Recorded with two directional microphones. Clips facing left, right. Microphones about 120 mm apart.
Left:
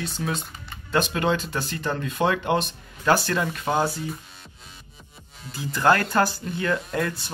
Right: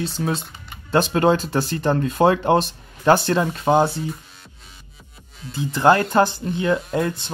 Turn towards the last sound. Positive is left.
turn(degrees=-25)  # may be behind; listen again after turning